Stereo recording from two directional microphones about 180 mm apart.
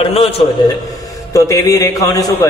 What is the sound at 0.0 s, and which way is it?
Speech, 30° left (ahead or behind).